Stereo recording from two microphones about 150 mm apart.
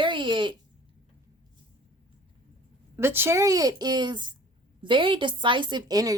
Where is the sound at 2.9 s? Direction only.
15° right (ahead or behind).